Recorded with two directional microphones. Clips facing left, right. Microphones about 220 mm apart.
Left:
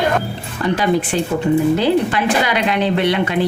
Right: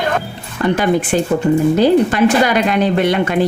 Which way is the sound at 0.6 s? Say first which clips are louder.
Right 2 dB; 50° right (ahead or behind).